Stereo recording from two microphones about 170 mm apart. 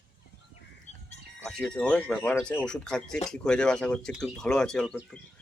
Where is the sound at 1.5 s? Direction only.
5° left (ahead or behind).